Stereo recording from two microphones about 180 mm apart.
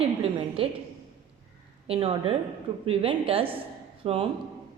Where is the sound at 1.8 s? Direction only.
30° right (ahead or behind).